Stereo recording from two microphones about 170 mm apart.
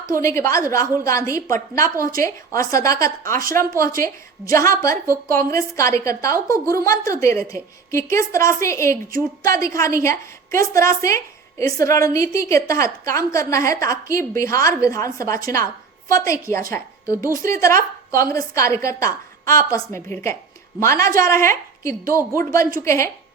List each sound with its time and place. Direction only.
0.2 s a woman's voice: 15° left (ahead or behind)